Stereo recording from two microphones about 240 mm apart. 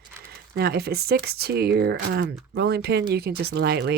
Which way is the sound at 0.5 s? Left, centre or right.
Right.